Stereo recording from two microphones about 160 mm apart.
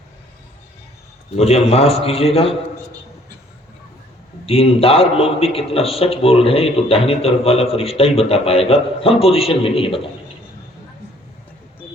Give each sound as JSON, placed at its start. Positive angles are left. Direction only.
{"t": 1.4, "sound": "a man's voice", "side_deg": 40}
{"t": 4.4, "sound": "a man's voice", "side_deg": 35}